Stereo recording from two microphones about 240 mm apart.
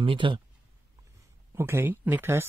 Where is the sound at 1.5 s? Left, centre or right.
Centre.